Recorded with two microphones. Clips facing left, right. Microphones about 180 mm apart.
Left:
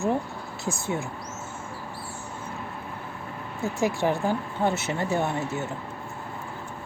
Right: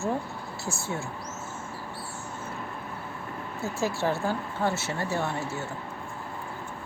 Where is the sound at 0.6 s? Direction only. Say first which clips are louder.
Left 4 dB; 15° left (ahead or behind).